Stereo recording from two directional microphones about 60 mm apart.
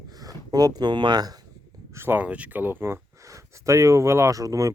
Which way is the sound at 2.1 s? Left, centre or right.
Right.